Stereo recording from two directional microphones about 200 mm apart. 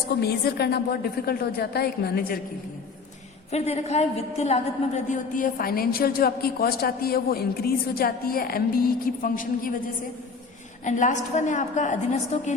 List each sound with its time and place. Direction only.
0.2 s a woman's voice: 50° left (ahead or behind)
3.5 s a woman's voice: 30° left (ahead or behind)
10.8 s a woman's voice: 40° left (ahead or behind)